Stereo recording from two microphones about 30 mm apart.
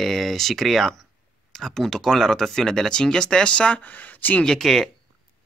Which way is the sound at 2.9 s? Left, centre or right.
Left.